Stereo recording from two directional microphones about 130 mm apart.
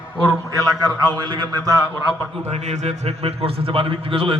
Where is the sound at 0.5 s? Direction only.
30° right (ahead or behind).